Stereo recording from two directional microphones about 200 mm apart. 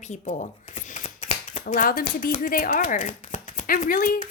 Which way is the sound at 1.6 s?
45° left (ahead or behind).